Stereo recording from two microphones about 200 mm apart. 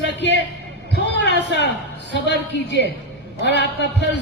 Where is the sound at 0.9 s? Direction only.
60° left (ahead or behind).